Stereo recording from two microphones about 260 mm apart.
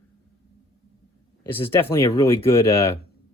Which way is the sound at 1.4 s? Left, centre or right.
Centre.